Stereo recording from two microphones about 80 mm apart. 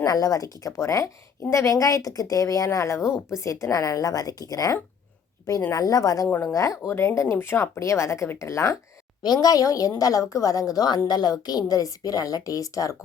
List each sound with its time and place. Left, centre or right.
0.0 s a woman's voice: left
9.2 s a woman's voice: left